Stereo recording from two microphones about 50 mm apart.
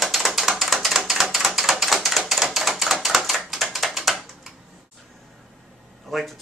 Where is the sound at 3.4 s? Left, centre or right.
Centre.